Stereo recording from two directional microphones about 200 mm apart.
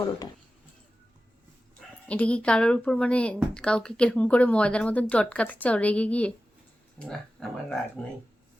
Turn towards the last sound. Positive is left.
turn(degrees=5)  # may be behind; listen again after turning